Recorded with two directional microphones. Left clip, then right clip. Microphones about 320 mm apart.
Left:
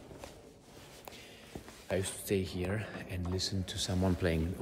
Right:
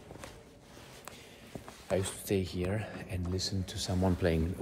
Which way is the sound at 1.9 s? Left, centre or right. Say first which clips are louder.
Right 2 dB; centre.